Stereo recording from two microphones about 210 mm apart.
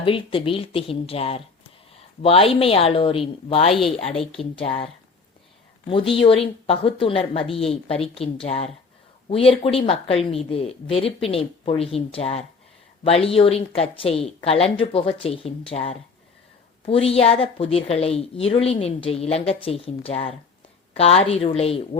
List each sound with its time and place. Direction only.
0.0 s a woman's voice: 25° left (ahead or behind)
5.9 s a woman's voice: 25° left (ahead or behind)